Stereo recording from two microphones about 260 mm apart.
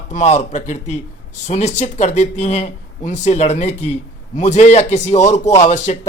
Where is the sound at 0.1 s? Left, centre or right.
Left.